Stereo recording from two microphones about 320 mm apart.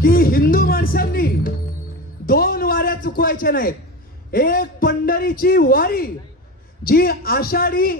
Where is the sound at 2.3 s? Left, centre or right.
Left.